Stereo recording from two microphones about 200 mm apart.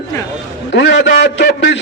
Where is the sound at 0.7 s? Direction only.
60° left (ahead or behind).